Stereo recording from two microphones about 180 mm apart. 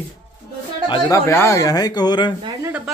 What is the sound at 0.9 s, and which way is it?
Speech, 15° left (ahead or behind).